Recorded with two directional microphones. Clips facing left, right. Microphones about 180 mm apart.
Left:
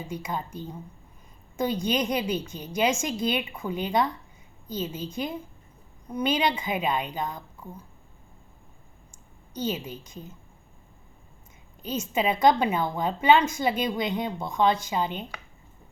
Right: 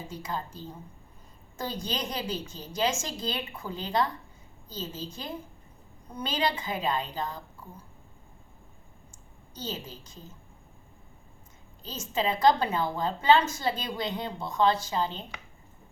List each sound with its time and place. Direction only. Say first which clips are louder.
0.1 s a woman's voice: left 3 dB; 15° left (ahead or behind)
9.6 s a woman's voice: left 7 dB; 20° left (ahead or behind)
11.8 s a woman's voice: left 4 dB; 20° left (ahead or behind)